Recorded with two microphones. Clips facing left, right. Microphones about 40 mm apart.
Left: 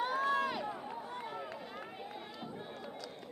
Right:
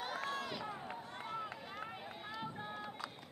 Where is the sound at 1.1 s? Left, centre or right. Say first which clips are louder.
Left 2 dB; centre.